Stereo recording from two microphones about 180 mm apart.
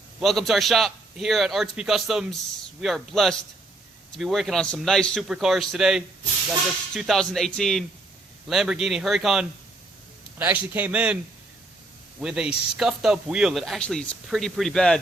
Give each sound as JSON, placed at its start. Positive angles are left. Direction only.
{"t": 0.2, "sound": "a man's voice", "side_deg": 0}
{"t": 12.2, "sound": "speech", "side_deg": -5}